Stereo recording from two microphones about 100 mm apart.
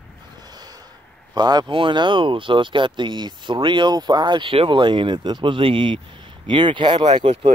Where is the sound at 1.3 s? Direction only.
45° right (ahead or behind).